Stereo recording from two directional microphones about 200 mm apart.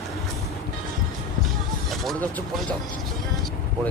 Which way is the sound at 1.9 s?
5° left (ahead or behind).